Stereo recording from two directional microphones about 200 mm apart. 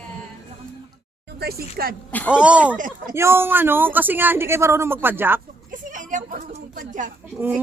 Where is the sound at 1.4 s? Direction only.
50° right (ahead or behind).